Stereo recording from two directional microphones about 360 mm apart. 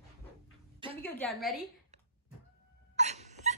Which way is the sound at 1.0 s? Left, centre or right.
Centre.